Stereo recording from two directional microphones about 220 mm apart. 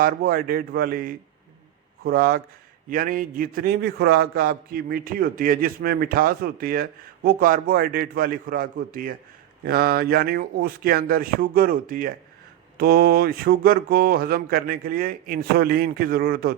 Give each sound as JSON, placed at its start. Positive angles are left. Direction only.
{"t": 0.0, "sound": "a man's voice", "side_deg": -40}